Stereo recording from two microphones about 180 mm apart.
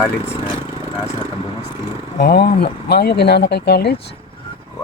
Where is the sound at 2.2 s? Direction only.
60° left (ahead or behind).